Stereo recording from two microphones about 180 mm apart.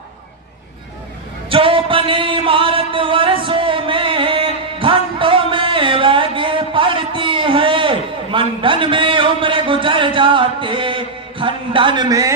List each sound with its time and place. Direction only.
1.5 s music: 30° right (ahead or behind)